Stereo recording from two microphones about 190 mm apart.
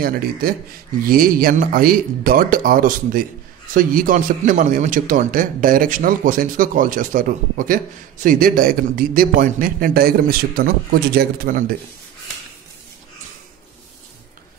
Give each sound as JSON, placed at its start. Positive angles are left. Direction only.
{"t": 0.0, "sound": "a man's voice", "side_deg": -50}